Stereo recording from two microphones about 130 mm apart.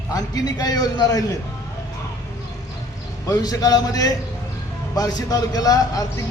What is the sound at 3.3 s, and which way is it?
A man's voice, 30° left (ahead or behind).